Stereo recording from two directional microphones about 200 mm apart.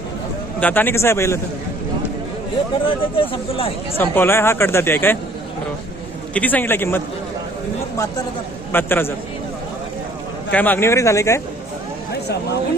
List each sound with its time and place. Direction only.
0.6 s speech: 10° left (ahead or behind)
2.8 s speech: 25° left (ahead or behind)
3.9 s speech: 10° left (ahead or behind)
6.3 s speech: 10° left (ahead or behind)
8.7 s speech: 10° left (ahead or behind)
10.5 s speech: 10° left (ahead or behind)